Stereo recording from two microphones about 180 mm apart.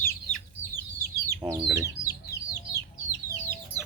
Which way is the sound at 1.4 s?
20° right (ahead or behind).